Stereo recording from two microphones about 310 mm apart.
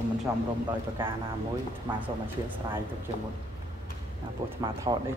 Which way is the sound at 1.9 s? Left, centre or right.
Centre.